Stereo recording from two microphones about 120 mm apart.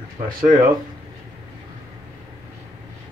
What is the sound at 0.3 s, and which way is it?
Speech, 40° right (ahead or behind).